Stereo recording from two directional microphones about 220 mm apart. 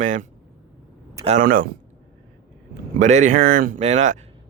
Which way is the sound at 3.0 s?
35° right (ahead or behind).